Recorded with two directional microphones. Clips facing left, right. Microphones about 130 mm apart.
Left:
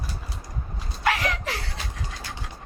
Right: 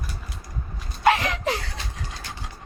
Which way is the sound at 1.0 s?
25° right (ahead or behind).